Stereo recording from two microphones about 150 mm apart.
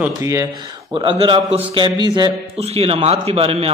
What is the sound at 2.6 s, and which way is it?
A man's voice, 40° right (ahead or behind).